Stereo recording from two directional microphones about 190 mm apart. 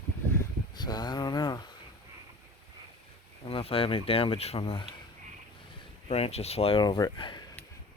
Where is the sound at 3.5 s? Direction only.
30° left (ahead or behind).